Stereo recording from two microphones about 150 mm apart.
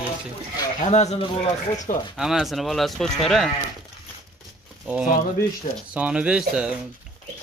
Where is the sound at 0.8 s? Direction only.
45° left (ahead or behind).